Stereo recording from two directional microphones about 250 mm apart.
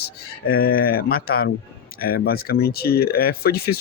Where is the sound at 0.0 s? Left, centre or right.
Left.